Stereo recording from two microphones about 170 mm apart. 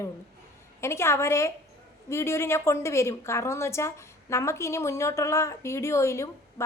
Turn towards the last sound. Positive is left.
turn(degrees=15)  # may be behind; listen again after turning